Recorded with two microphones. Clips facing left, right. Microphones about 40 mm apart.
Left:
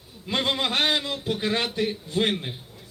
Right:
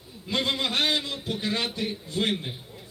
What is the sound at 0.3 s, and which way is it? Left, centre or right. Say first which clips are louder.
Speech: left 2 dB; left.